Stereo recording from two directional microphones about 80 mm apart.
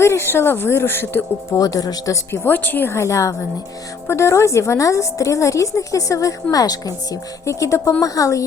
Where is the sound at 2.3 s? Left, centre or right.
Left.